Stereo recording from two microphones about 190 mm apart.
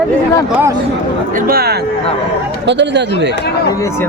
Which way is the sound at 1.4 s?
55° right (ahead or behind).